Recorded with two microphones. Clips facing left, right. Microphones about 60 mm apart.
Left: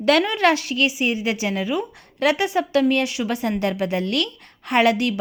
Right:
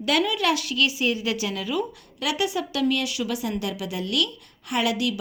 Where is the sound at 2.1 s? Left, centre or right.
Left.